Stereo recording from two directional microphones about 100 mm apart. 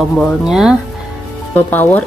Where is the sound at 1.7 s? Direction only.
20° left (ahead or behind).